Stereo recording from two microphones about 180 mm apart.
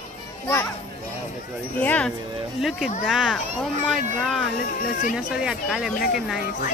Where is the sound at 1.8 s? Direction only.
5° left (ahead or behind).